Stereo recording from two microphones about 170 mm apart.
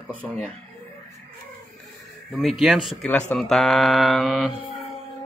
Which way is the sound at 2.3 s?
Centre (ahead or behind).